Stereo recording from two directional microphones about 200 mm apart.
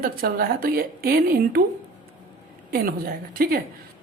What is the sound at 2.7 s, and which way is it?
Speech, 50° right (ahead or behind).